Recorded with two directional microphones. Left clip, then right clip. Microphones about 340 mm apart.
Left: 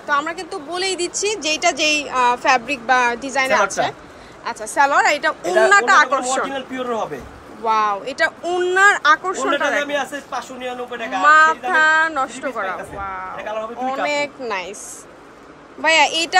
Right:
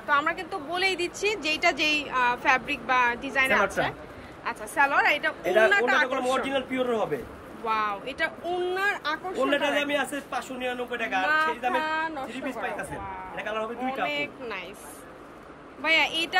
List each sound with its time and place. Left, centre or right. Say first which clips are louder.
0.0 s speech: left 4 dB; centre
5.7 s speech: left 10 dB; centre
13.4 s a man's voice: left 4 dB; centre
14.0 s speech: left 8 dB; centre
15.8 s speech: left 8 dB; centre